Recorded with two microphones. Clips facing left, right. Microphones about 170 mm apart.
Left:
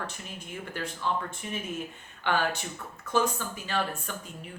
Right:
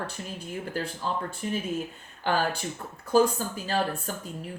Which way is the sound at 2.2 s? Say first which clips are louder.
Right 2 dB; 40° right (ahead or behind).